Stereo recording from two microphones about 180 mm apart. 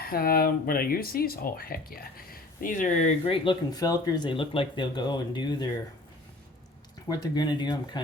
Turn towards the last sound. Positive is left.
turn(degrees=25)  # may be behind; listen again after turning